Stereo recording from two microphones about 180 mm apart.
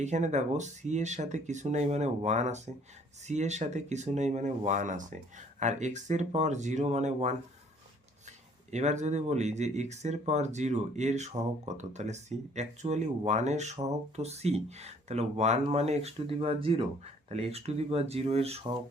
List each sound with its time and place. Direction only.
0.0 s speech: 40° right (ahead or behind)
8.7 s speech: 40° right (ahead or behind)